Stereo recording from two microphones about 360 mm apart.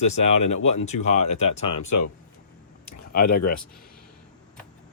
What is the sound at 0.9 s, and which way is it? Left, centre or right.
Speech, centre.